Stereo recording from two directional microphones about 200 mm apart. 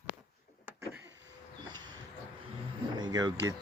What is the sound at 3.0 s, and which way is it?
Speech, 20° right (ahead or behind).